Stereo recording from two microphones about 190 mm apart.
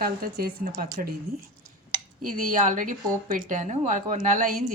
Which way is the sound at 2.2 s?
45° right (ahead or behind).